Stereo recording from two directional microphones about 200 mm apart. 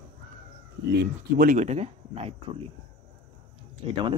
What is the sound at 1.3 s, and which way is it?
Speech, 45° right (ahead or behind).